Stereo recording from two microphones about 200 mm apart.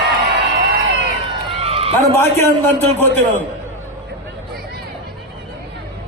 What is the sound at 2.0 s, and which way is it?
Speech, 15° left (ahead or behind).